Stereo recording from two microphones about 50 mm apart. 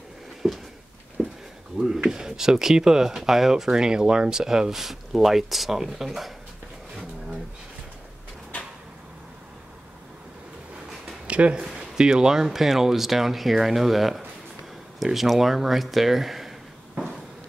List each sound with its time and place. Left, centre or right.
0.4 s speech: centre
1.2 s a sound: centre
1.7 s speech: centre
11.2 s speech: right; by 16.5 s centre